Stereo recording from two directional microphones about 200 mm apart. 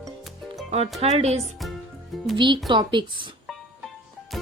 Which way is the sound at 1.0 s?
30° right (ahead or behind).